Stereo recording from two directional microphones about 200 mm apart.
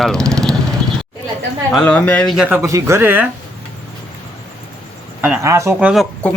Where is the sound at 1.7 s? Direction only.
5° left (ahead or behind).